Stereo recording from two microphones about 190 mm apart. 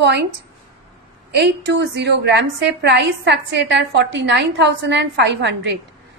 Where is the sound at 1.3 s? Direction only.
70° right (ahead or behind).